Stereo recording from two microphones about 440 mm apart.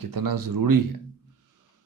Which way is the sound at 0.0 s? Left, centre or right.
Right.